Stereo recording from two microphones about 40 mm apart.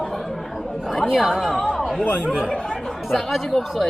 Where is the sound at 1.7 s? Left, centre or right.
Centre.